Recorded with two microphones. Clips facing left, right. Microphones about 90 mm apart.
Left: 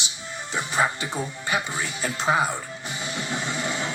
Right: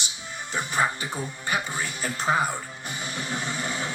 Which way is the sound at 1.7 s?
45° right (ahead or behind).